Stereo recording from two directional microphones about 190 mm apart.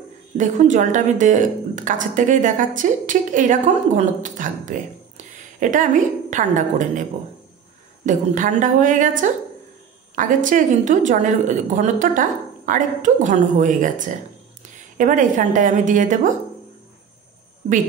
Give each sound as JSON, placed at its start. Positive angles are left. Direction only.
{"t": 0.4, "sound": "a woman's voice", "side_deg": -40}